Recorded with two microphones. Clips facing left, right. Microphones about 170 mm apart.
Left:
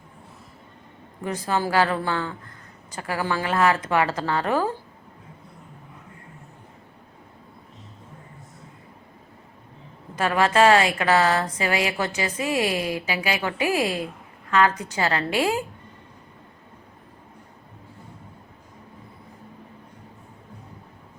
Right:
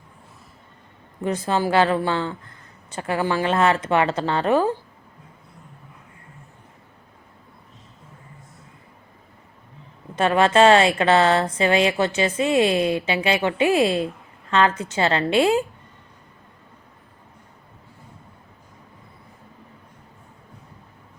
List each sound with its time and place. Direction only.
1.2 s a woman's voice: 20° right (ahead or behind)
10.2 s a woman's voice: 25° right (ahead or behind)